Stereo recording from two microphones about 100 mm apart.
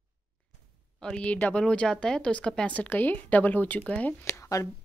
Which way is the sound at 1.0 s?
10° left (ahead or behind).